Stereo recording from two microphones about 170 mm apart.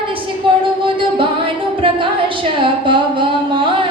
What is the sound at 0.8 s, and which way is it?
Music, 30° right (ahead or behind).